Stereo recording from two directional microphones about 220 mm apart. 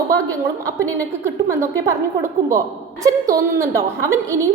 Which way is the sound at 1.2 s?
10° right (ahead or behind).